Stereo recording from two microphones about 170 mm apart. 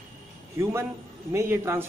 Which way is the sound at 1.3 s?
15° right (ahead or behind).